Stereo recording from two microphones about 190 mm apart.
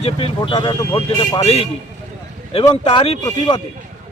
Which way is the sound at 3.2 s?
15° left (ahead or behind).